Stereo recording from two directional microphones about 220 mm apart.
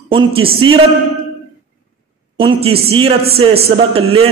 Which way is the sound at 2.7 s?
25° right (ahead or behind).